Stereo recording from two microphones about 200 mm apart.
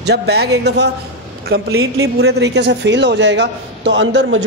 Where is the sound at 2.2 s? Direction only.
60° right (ahead or behind).